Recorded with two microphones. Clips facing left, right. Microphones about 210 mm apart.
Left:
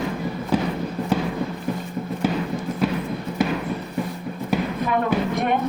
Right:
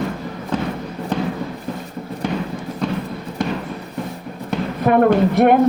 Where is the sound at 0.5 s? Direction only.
10° left (ahead or behind).